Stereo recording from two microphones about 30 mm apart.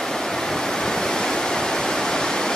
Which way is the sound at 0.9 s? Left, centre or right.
Centre.